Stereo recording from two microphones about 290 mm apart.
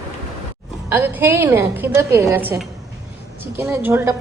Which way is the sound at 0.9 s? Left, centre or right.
Centre.